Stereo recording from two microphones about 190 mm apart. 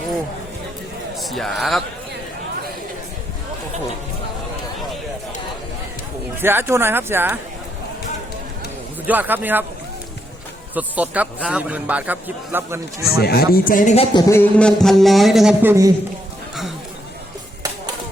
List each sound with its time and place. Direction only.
1.1 s speech: centre (ahead or behind)
6.4 s a man's voice: 10° right (ahead or behind)
9.0 s a man's voice: 10° right (ahead or behind)
10.8 s a man's voice: 10° right (ahead or behind)
13.1 s a man's voice: 55° left (ahead or behind); by 14.4 s 20° left (ahead or behind)
14.6 s music: centre (ahead or behind)